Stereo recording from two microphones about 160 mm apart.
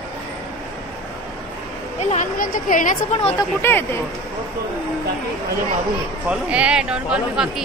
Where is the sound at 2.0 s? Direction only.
55° left (ahead or behind).